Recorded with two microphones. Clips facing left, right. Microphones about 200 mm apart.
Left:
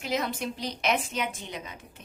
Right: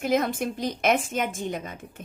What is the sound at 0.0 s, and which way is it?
A woman's voice, 50° right (ahead or behind).